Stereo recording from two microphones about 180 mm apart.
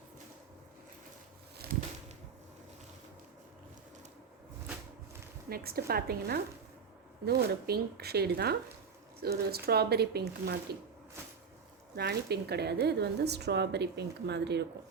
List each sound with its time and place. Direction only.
1.6 s a sound: 60° right (ahead or behind)
5.5 s speech: 55° right (ahead or behind)
11.9 s a woman's voice: 65° right (ahead or behind)